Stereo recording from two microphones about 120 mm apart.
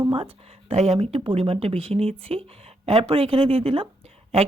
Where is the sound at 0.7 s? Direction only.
60° right (ahead or behind).